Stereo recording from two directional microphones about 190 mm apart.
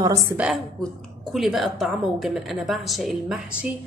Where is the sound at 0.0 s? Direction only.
20° right (ahead or behind).